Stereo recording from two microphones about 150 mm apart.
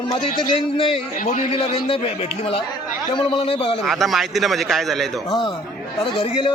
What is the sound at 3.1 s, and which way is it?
Speech, 35° left (ahead or behind).